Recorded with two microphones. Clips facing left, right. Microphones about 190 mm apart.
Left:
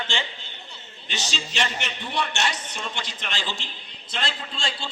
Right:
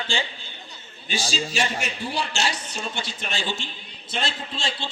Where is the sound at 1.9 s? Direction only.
30° right (ahead or behind).